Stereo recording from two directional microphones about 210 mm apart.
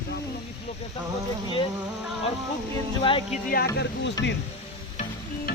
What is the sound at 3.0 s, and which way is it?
Speech, 25° left (ahead or behind).